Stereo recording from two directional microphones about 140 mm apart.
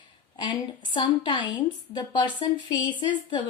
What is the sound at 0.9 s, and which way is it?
Speech, 35° left (ahead or behind).